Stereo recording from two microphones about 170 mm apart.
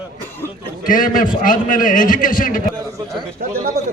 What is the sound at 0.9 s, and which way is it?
A man's voice, 50° left (ahead or behind).